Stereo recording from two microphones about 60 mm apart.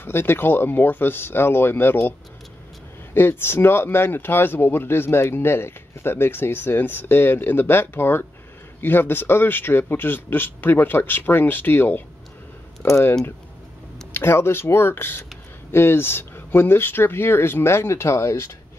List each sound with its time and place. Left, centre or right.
0.0 s speech: left
3.2 s speech: left
14.1 s speech: left